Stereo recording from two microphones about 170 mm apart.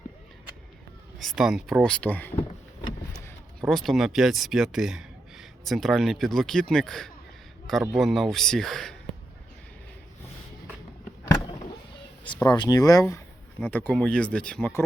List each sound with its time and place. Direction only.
1.4 s speech: 5° right (ahead or behind)
3.6 s speech: 5° left (ahead or behind)
12.5 s speech: 25° left (ahead or behind)